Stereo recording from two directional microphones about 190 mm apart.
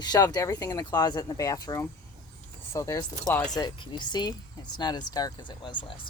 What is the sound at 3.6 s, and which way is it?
Speech, 25° left (ahead or behind).